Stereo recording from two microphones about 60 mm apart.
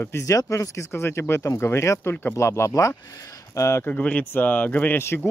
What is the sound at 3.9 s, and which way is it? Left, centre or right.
Speech, left.